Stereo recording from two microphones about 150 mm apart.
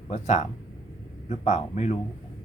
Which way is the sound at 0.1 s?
50° left (ahead or behind).